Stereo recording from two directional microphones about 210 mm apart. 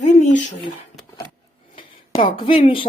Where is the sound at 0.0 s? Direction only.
35° left (ahead or behind).